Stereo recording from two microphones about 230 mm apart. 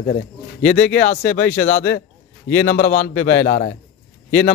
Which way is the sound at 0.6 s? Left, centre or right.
Centre.